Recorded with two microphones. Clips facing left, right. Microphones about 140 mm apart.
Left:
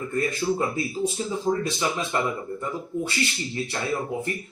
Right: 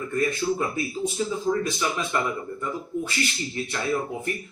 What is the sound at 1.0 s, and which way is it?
Speech, 35° left (ahead or behind).